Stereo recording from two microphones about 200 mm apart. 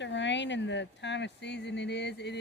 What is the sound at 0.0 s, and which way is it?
Speech, 65° left (ahead or behind).